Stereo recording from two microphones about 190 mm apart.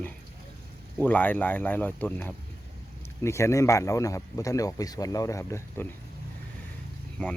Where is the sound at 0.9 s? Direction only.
10° left (ahead or behind).